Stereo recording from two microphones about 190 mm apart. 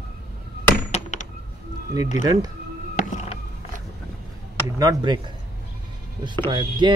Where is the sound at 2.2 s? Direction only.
20° right (ahead or behind).